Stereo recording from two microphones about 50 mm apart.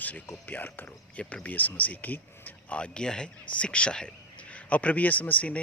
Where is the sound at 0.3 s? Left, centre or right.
Left.